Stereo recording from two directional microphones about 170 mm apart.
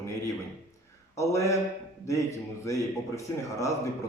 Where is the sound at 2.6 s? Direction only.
20° left (ahead or behind).